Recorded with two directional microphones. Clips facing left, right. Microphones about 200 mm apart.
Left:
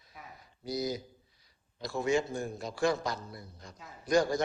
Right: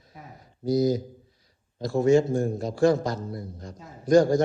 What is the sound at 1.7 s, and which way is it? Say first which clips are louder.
Speech: right 10 dB; 45° right (ahead or behind).